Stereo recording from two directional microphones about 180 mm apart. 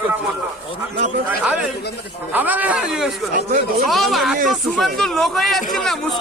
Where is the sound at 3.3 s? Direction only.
50° right (ahead or behind).